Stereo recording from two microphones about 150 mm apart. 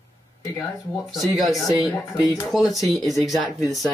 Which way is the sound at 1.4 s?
Centre (ahead or behind).